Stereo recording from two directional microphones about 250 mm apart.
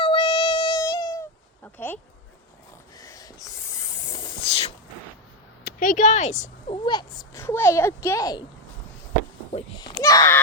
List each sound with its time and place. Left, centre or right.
0.0 s a sound: centre
5.6 s a woman's voice: left
6.8 s speech: centre
9.5 s a child's voice: left